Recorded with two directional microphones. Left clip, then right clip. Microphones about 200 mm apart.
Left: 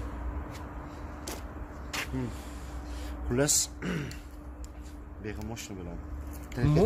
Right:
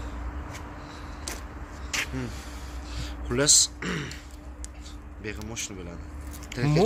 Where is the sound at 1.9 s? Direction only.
10° left (ahead or behind).